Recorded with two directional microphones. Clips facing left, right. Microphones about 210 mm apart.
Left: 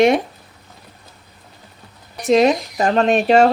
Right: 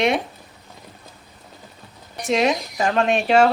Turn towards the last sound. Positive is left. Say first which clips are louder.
# left 3 dB
turn(degrees=40)  # may be behind; listen again after turning